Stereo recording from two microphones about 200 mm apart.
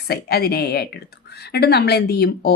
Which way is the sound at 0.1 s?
50° left (ahead or behind).